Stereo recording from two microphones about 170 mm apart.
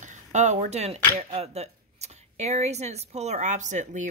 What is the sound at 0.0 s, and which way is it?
Speech, 45° right (ahead or behind).